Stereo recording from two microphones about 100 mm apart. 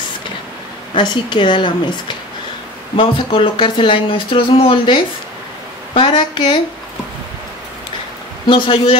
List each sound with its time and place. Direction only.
0.9 s a woman's voice: 50° left (ahead or behind)
5.9 s a woman's voice: 55° left (ahead or behind)
8.5 s speech: 55° left (ahead or behind)